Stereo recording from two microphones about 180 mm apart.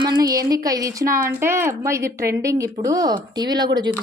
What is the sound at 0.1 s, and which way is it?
A woman's voice, 20° right (ahead or behind).